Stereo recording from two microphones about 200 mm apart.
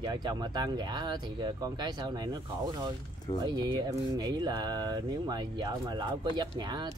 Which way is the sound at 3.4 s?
20° right (ahead or behind).